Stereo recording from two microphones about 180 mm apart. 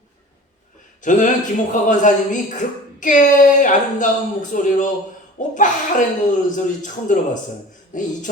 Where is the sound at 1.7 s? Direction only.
45° left (ahead or behind).